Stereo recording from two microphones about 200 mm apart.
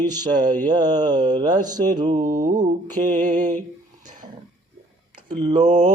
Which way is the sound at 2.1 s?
35° right (ahead or behind).